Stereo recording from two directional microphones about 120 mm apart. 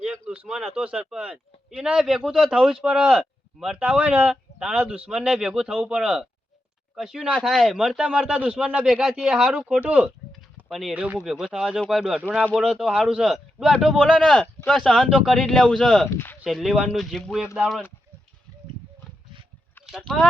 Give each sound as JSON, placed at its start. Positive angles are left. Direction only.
{"t": 0.0, "sound": "speech", "side_deg": -5}
{"t": 16.0, "sound": "speech", "side_deg": 20}
{"t": 16.4, "sound": "speech", "side_deg": 0}
{"t": 20.0, "sound": "speech", "side_deg": 5}